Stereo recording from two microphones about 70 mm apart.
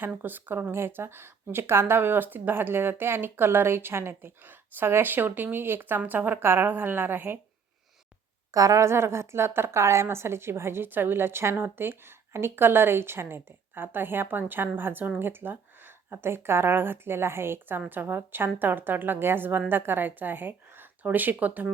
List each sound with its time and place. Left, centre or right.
0.0 s a woman's voice: right
8.5 s a woman's voice: right